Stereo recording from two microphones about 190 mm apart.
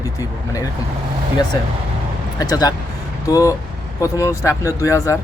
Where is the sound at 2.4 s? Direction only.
20° left (ahead or behind).